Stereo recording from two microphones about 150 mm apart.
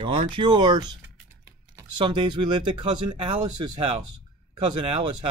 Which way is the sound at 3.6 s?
40° right (ahead or behind).